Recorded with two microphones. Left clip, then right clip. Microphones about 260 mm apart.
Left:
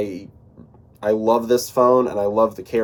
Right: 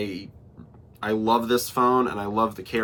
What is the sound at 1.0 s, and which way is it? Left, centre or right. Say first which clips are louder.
Speech: left 5 dB; right.